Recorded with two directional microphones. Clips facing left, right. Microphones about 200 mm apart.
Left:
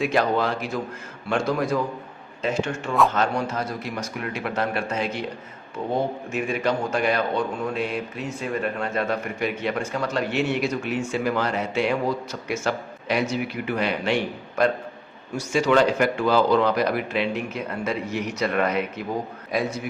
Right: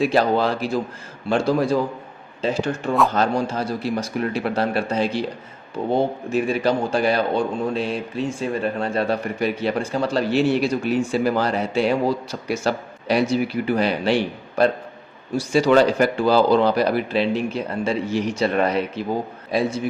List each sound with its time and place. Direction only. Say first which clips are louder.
0.0 s a man's voice: right 3 dB; 35° right (ahead or behind)